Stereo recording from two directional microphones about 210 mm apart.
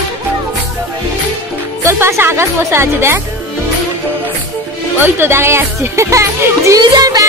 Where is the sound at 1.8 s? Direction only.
15° right (ahead or behind).